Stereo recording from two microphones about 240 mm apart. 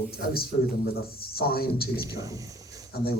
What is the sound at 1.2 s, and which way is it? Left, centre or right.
Speech, left.